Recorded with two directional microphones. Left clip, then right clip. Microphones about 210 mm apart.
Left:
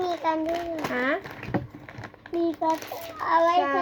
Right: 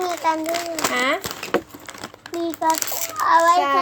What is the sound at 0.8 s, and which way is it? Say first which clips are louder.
Speech: right 7 dB; 40° right (ahead or behind).